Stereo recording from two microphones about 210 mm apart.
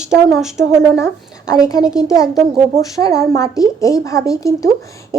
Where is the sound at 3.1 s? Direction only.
15° left (ahead or behind).